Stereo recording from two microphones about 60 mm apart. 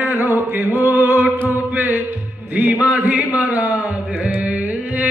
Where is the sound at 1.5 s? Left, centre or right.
Right.